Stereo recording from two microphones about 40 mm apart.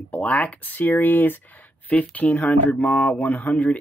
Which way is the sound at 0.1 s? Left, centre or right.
Left.